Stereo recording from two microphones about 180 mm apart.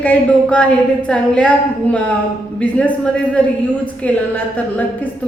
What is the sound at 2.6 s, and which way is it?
Speech, 5° left (ahead or behind).